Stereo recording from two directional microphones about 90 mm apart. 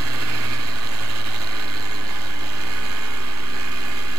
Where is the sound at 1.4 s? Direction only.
45° right (ahead or behind).